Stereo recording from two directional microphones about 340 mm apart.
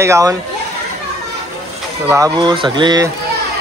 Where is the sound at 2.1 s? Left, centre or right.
Centre.